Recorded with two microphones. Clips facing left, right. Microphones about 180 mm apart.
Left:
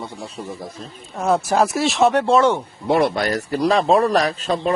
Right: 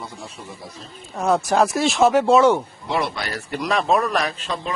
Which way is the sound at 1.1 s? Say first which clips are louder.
Left 1 dB; centre (ahead or behind).